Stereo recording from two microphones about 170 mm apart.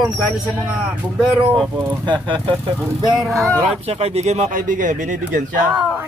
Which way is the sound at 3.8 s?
35° right (ahead or behind).